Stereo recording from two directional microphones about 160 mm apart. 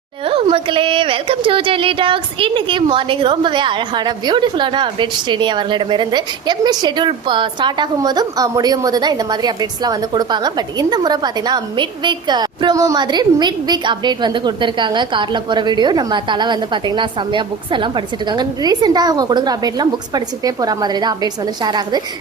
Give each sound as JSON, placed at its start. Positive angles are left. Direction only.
{"t": 0.3, "sound": "a woman's voice", "side_deg": -35}